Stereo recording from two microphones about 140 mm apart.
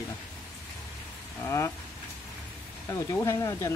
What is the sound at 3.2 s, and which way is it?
Speech, 25° left (ahead or behind).